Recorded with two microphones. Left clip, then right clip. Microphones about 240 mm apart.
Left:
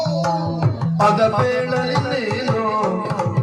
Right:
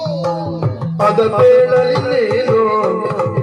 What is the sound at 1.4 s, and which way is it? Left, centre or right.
Music, right.